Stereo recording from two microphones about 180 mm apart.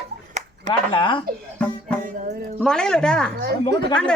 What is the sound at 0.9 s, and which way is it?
Speech, 25° left (ahead or behind).